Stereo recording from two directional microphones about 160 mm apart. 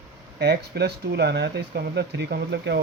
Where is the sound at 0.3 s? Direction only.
90° right.